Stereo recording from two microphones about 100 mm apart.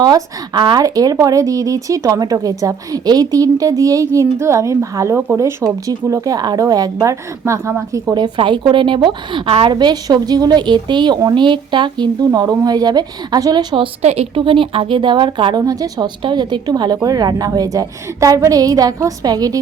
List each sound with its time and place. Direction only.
0.0 s speech: 45° right (ahead or behind); by 8.1 s 25° right (ahead or behind)
8.1 s a woman's voice: 50° right (ahead or behind)
9.7 s speech: 45° right (ahead or behind)
15.6 s speech: 35° right (ahead or behind)
16.2 s speech: 50° right (ahead or behind)